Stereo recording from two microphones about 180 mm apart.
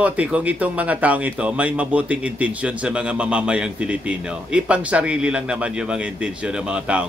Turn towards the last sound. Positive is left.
turn(degrees=-5)  # may be behind; listen again after turning